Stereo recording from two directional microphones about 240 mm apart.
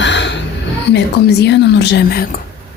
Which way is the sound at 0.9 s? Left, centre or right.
Left.